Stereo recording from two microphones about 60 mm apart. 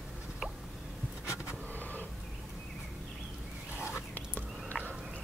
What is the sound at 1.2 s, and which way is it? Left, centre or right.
Vehicle, left.